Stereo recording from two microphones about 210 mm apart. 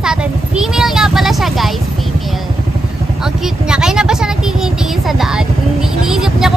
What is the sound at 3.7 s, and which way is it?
Vehicle, 5° right (ahead or behind).